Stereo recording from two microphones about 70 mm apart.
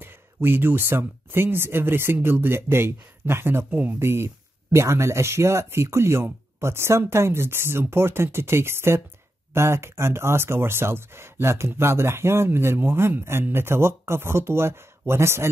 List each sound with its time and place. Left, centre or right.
0.0 s speech: right